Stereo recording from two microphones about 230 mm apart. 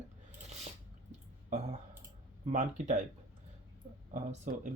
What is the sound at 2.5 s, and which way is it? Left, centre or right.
Speech, right.